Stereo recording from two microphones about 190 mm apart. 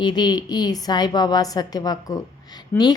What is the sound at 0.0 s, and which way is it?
A woman's voice, 20° left (ahead or behind).